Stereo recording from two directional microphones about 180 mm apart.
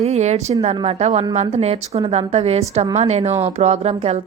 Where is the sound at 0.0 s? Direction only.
40° right (ahead or behind).